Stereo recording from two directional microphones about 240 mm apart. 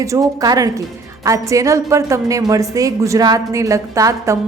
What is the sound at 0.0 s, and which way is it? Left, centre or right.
A woman's voice, centre.